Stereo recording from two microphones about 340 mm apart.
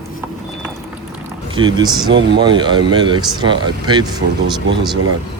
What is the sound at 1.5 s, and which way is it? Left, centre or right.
Speech, centre.